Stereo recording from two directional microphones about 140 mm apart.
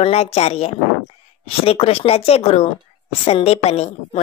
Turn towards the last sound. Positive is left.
turn(degrees=45)  # may be behind; listen again after turning